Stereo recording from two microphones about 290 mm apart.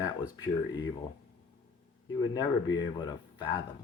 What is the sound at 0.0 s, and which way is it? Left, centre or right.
Speech, centre.